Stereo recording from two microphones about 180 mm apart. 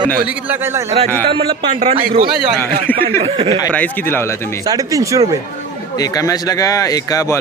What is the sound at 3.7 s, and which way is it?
Speech, 10° left (ahead or behind).